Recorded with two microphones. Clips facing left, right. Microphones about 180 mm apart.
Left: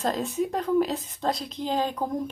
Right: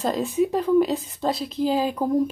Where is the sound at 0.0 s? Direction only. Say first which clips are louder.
Right 4 dB; centre (ahead or behind).